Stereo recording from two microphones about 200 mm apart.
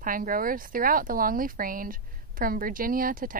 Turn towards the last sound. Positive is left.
turn(degrees=-45)  # may be behind; listen again after turning